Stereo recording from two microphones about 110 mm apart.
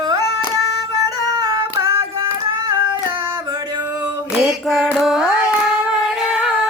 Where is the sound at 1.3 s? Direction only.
35° right (ahead or behind).